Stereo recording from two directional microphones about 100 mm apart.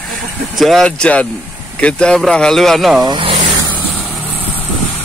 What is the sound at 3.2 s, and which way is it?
Vehicle, 65° right (ahead or behind).